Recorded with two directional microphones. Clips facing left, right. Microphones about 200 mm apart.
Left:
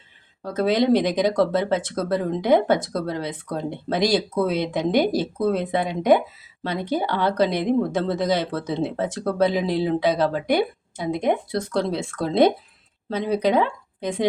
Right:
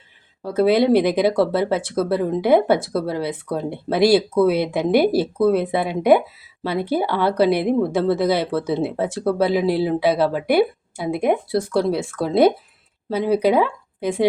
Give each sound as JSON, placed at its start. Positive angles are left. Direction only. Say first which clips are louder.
{"t": 0.4, "sound": "speech", "louder": "right 4 dB", "side_deg": -10}